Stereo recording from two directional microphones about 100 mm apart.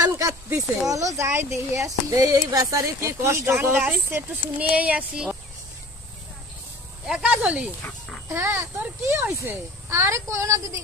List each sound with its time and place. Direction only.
0.0 s a sound: 35° right (ahead or behind)
0.8 s speech: 35° right (ahead or behind); by 5.4 s 10° right (ahead or behind)
7.1 s speech: 10° right (ahead or behind)
8.3 s a child's voice: 25° right (ahead or behind)